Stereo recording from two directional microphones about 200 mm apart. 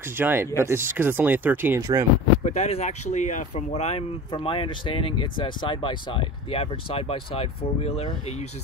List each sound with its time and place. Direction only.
0.2 s speech: 10° right (ahead or behind)
2.4 s speech: 35° left (ahead or behind)